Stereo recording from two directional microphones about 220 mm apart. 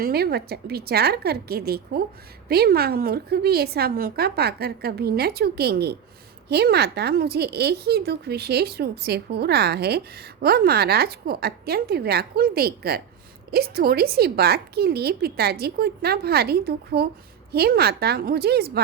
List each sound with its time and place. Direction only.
0.0 s a woman's voice: 45° right (ahead or behind)